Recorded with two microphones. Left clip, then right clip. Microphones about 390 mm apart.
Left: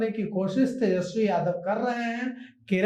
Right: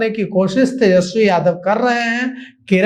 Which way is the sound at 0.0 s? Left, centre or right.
Right.